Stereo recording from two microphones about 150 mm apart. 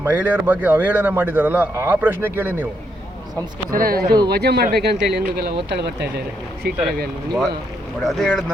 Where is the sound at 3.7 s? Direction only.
75° right (ahead or behind); by 6.8 s 90° right.